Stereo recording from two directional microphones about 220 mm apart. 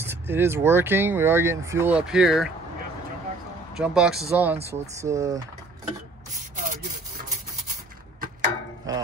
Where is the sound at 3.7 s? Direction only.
Centre (ahead or behind).